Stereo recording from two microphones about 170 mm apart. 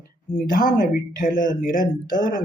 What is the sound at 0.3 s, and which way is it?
Speech, 55° left (ahead or behind).